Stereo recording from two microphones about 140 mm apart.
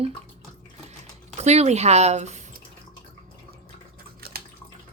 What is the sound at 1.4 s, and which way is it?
Speech, 50° right (ahead or behind).